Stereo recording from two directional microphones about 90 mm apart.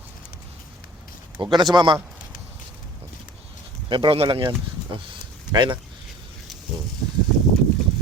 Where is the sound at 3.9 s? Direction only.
65° right (ahead or behind).